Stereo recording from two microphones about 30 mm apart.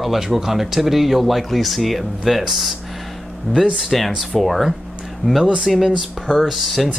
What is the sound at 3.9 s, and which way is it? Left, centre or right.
Speech, centre.